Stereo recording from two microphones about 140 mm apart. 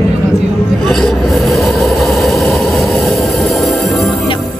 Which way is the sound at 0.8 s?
Centre (ahead or behind).